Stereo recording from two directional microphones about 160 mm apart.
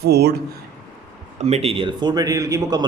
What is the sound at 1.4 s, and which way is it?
Speech, 40° right (ahead or behind).